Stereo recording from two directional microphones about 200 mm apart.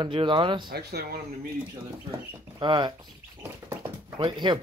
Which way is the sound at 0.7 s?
50° right (ahead or behind).